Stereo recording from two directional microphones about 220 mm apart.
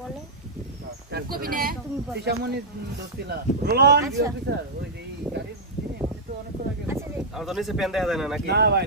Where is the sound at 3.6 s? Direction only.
50° right (ahead or behind).